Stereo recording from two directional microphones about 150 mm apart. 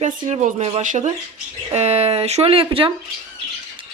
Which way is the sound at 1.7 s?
45° right (ahead or behind).